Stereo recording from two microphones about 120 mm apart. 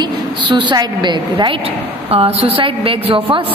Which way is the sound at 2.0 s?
55° right (ahead or behind).